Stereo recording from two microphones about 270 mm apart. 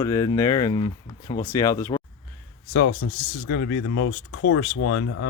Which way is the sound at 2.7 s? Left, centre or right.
Left.